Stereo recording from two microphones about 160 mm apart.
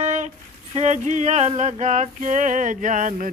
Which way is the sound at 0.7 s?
45° right (ahead or behind).